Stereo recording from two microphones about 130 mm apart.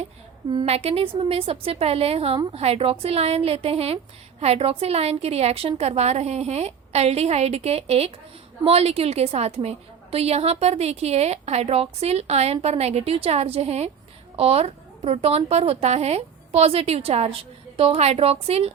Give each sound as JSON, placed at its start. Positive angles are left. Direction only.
{"t": 0.5, "sound": "a woman's voice", "side_deg": -55}